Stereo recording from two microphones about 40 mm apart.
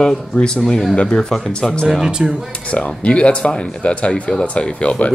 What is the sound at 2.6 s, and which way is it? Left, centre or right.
Speech, left.